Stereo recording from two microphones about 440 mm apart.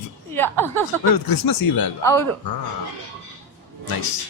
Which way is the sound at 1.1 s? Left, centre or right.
Left.